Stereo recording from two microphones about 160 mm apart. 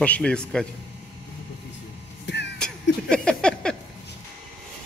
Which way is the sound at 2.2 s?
90° left.